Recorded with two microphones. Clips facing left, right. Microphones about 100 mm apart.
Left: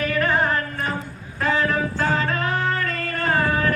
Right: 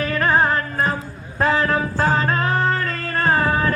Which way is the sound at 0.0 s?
35° right (ahead or behind).